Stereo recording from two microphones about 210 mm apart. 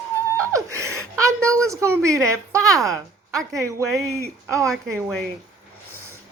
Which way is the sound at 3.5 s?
15° right (ahead or behind).